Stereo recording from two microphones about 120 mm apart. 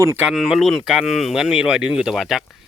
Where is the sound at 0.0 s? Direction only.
20° right (ahead or behind).